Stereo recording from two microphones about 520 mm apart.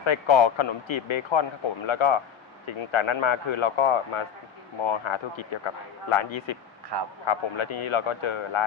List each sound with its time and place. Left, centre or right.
0.0 s speech: left
6.9 s a man's voice: right
7.3 s speech: left